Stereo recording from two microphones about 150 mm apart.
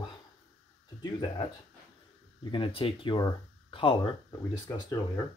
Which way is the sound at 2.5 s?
35° left (ahead or behind).